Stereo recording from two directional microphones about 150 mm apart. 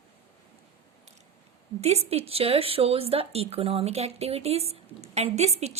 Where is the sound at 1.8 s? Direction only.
45° right (ahead or behind).